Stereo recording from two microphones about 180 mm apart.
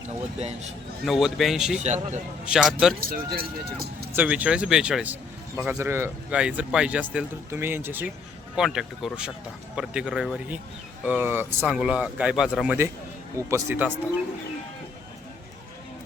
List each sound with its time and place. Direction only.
0.3 s a man's voice: 35° right (ahead or behind)
1.0 s speech: centre (ahead or behind)
1.8 s a man's voice: 40° right (ahead or behind)
2.4 s speech: 5° right (ahead or behind)
3.0 s speech: 55° right (ahead or behind)
4.1 s speech: 10° right (ahead or behind)